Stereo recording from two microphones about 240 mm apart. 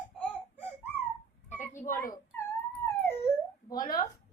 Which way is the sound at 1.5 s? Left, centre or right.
Left.